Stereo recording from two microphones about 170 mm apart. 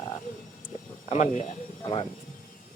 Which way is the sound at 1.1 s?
45° left (ahead or behind).